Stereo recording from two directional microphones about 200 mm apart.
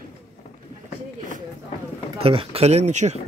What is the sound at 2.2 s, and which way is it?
Speech, 30° right (ahead or behind).